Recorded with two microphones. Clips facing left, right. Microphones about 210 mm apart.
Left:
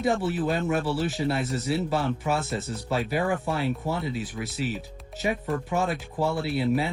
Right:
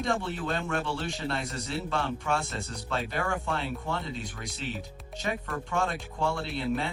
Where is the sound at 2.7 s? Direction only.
5° left (ahead or behind).